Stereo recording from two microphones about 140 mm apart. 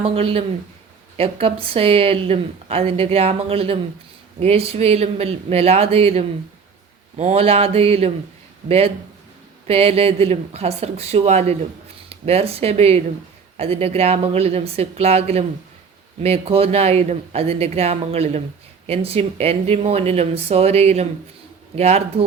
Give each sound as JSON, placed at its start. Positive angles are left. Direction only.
{"t": 0.0, "sound": "a woman's voice", "side_deg": -40}
{"t": 9.6, "sound": "a woman's voice", "side_deg": -45}